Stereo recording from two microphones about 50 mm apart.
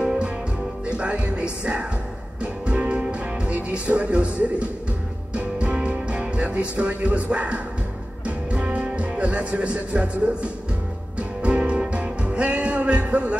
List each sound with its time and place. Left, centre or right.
0.0 s music: centre
0.8 s speech: right
2.4 s music: right
8.5 s speech: right
11.1 s music: right